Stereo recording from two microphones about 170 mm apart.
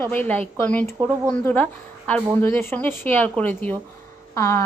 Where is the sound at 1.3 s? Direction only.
10° left (ahead or behind).